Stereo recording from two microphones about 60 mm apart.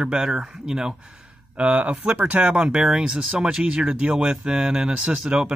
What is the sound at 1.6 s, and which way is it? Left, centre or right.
Speech, right.